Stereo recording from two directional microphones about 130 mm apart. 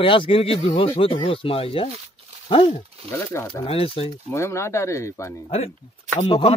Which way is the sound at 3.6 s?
45° left (ahead or behind).